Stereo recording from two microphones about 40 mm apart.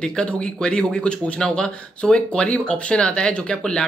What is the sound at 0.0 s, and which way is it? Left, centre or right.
Speech, centre.